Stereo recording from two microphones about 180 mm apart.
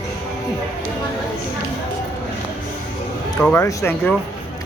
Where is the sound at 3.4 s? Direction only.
10° left (ahead or behind).